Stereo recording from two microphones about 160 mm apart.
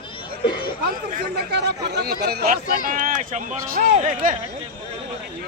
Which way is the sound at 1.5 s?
90° right.